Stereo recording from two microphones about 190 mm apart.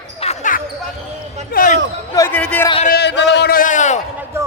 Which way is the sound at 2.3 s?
5° left (ahead or behind).